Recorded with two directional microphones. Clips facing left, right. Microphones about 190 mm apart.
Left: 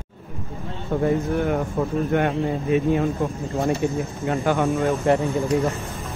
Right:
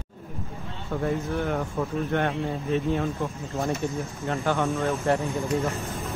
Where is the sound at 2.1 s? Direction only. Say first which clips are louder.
Left 5 dB; 10° left (ahead or behind).